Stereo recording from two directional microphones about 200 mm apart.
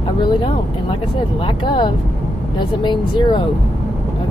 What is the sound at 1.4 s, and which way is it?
Speech, 25° left (ahead or behind).